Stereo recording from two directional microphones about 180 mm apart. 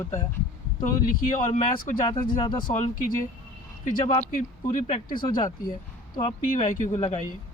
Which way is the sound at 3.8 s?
40° left (ahead or behind).